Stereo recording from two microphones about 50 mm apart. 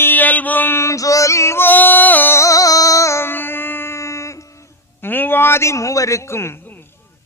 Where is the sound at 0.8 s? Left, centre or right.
Left.